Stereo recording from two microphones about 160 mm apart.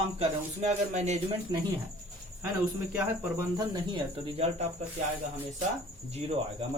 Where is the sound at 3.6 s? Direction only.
30° right (ahead or behind).